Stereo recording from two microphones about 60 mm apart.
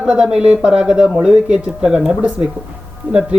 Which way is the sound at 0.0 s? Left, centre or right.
Centre.